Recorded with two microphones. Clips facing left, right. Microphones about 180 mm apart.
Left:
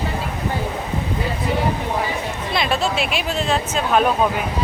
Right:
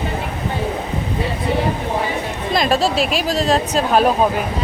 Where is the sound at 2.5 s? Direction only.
40° right (ahead or behind).